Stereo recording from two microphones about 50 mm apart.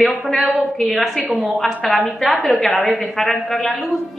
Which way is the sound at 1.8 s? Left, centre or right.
Left.